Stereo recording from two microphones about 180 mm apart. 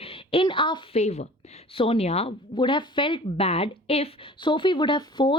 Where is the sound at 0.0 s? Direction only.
30° left (ahead or behind).